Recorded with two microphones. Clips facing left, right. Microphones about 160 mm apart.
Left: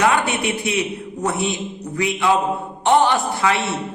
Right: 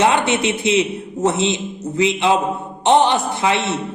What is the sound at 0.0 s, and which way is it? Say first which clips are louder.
A man's voice: right 2 dB; 25° right (ahead or behind).